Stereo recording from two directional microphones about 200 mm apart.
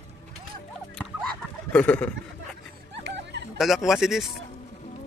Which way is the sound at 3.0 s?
60° right (ahead or behind).